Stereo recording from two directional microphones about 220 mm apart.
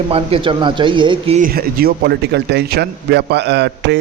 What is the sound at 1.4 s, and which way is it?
A man's voice, 40° right (ahead or behind).